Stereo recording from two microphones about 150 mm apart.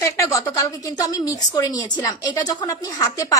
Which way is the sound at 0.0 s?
20° left (ahead or behind).